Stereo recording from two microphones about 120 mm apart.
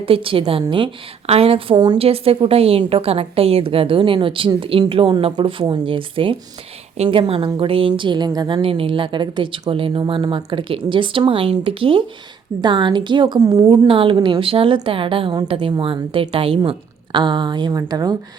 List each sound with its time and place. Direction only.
0.0 s a woman's voice: 50° right (ahead or behind)
2.0 s a woman's voice: 55° right (ahead or behind); by 8.6 s 35° right (ahead or behind)
8.6 s a woman's voice: 50° right (ahead or behind); by 13.8 s 30° right (ahead or behind)
13.8 s a woman's voice: 45° right (ahead or behind)